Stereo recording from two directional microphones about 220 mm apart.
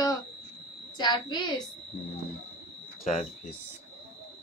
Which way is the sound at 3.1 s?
35° left (ahead or behind).